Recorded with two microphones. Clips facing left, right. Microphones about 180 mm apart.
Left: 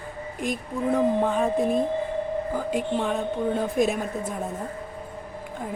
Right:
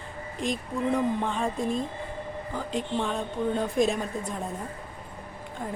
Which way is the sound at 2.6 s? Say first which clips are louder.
Left 1 dB; 5° left (ahead or behind).